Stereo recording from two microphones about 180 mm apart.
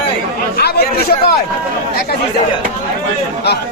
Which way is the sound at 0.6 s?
60° left (ahead or behind).